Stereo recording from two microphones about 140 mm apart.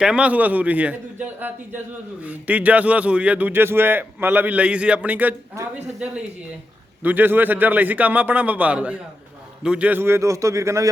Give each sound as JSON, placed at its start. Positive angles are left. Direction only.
{"t": 0.0, "sound": "a man's voice", "side_deg": -5}